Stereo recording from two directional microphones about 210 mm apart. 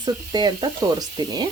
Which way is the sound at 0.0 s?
20° right (ahead or behind).